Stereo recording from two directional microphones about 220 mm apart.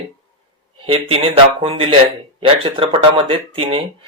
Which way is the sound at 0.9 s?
25° right (ahead or behind).